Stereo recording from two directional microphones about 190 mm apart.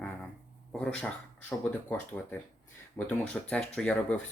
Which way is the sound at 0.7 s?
5° left (ahead or behind).